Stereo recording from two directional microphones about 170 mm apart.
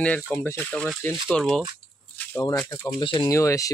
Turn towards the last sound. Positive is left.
turn(degrees=20)  # may be behind; listen again after turning